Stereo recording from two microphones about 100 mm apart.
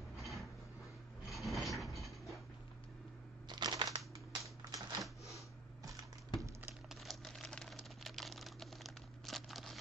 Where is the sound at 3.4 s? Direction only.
45° right (ahead or behind).